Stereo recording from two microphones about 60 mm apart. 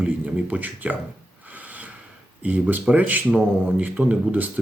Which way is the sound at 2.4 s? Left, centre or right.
Right.